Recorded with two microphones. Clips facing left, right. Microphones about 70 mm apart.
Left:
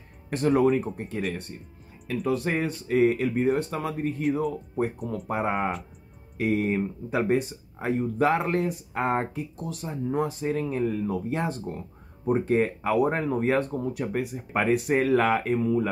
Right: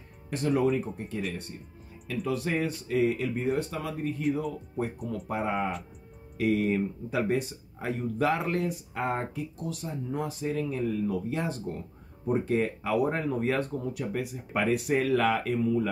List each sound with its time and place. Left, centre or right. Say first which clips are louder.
0.3 s speech: left 4 dB; left
6.3 s speech: left 1 dB; left